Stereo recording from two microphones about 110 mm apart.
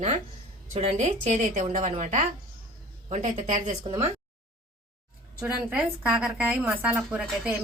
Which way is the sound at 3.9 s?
40° right (ahead or behind).